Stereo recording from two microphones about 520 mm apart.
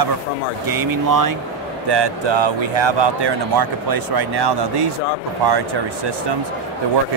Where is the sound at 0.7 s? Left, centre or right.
Right.